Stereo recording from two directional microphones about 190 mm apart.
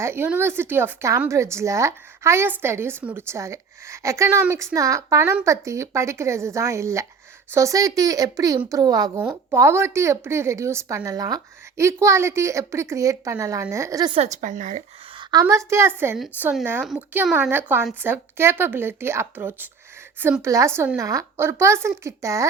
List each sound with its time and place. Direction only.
0.0 s a woman's voice: 10° right (ahead or behind)
14.2 s a woman's voice: 40° right (ahead or behind)
15.2 s a woman's voice: 20° right (ahead or behind); by 17.3 s centre (ahead or behind)
17.3 s a woman's voice: 10° right (ahead or behind)